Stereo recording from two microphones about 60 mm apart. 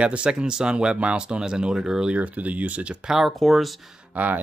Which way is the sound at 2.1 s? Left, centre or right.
Right.